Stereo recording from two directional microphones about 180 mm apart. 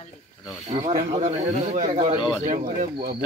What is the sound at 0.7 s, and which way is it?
Speech, 35° right (ahead or behind).